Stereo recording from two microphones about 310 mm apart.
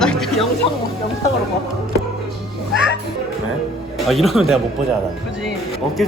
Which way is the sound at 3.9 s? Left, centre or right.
Centre.